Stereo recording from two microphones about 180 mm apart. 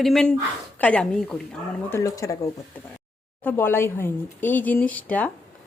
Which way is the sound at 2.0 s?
20° left (ahead or behind).